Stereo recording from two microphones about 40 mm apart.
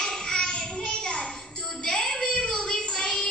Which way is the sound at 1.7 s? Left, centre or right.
Centre.